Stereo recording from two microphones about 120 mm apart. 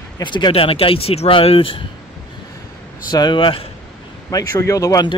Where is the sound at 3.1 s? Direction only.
40° left (ahead or behind).